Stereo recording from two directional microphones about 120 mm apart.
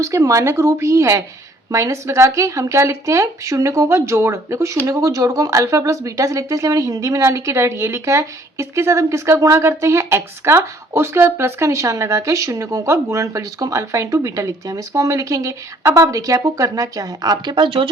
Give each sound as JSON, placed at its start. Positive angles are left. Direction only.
{"t": 0.0, "sound": "speech", "side_deg": -25}